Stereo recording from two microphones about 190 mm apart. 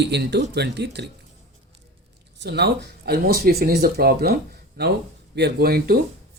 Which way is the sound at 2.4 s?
60° right (ahead or behind).